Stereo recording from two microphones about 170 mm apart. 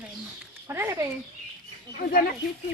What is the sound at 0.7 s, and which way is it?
Speech, 15° right (ahead or behind).